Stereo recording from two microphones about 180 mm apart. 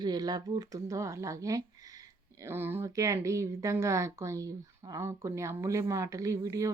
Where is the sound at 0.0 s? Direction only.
20° right (ahead or behind).